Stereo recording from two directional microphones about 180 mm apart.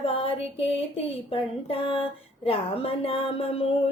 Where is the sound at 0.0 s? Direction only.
30° left (ahead or behind).